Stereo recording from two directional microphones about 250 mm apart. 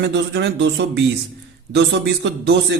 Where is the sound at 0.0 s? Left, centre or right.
Right.